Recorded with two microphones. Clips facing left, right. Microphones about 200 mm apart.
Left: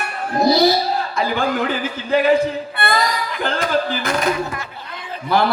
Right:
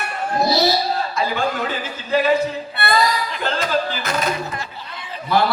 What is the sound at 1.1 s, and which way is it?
Speech, 55° left (ahead or behind).